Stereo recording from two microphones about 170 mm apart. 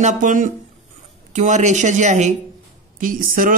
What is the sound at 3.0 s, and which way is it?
Speech, 55° right (ahead or behind).